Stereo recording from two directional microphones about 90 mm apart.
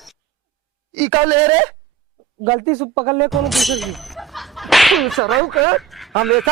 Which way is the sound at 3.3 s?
Centre (ahead or behind).